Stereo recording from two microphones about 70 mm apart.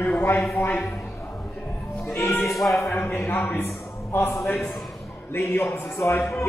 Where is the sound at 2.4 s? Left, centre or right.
Centre.